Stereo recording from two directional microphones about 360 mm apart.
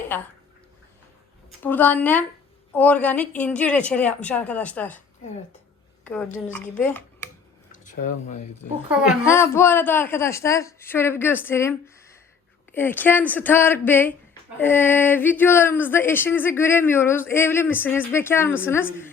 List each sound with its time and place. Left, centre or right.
0.1 s speech: centre
1.5 s speech: centre
6.1 s speech: centre
7.7 s a sound: left
9.2 s a woman's voice: centre